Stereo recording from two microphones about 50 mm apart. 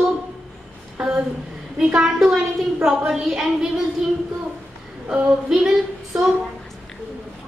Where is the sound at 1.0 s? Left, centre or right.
Centre.